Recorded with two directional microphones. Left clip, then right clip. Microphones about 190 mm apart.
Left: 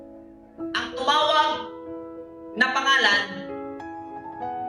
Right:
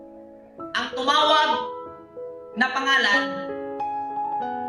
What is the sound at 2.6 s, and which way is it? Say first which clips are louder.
Music: left 1 dB; 30° left (ahead or behind).